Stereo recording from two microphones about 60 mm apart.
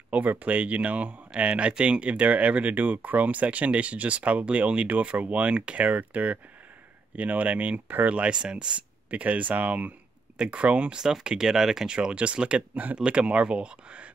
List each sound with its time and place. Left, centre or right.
0.1 s speech: right